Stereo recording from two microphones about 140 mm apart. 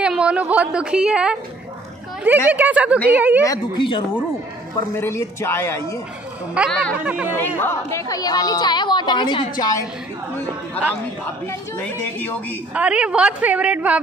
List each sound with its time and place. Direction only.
0.0 s a woman's voice: 5° right (ahead or behind)
2.5 s a woman's voice: 10° right (ahead or behind)
3.4 s speech: 35° left (ahead or behind)
4.7 s a woman's voice: 20° left (ahead or behind)
6.6 s a woman's voice: 10° right (ahead or behind)
7.3 s a woman's voice: 15° left (ahead or behind)
11.4 s a woman's voice: 15° left (ahead or behind)
12.7 s a woman's voice: 10° right (ahead or behind)